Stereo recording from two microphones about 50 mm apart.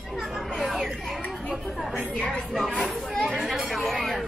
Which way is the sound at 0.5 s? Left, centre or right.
Centre.